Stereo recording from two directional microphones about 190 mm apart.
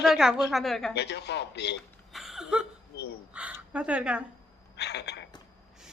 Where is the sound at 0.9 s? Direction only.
60° left (ahead or behind).